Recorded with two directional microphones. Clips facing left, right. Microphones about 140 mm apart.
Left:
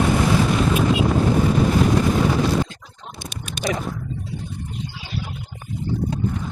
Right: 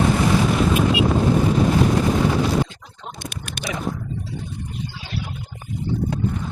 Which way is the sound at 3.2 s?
55° right (ahead or behind).